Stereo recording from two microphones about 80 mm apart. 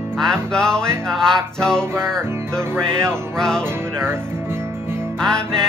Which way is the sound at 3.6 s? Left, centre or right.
Right.